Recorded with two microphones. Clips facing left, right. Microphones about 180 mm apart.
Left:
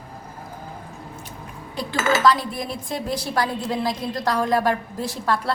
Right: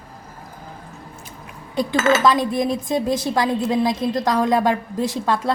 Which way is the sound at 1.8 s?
20° right (ahead or behind).